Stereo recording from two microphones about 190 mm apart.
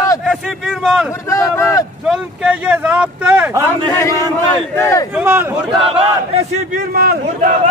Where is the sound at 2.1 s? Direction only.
5° right (ahead or behind).